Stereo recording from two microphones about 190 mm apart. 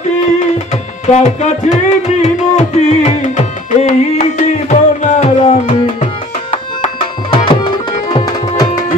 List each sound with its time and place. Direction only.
1.0 s music: 35° left (ahead or behind)
7.2 s tabla: 25° left (ahead or behind)